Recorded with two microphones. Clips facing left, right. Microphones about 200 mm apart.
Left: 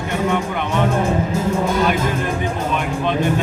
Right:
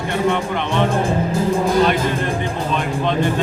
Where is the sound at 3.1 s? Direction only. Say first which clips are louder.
Even; 15° left (ahead or behind).